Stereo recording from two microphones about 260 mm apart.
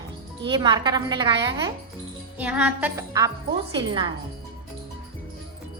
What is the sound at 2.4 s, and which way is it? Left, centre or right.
Speech, centre.